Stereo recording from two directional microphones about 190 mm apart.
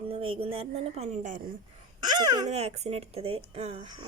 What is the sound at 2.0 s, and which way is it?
Speech, 20° right (ahead or behind).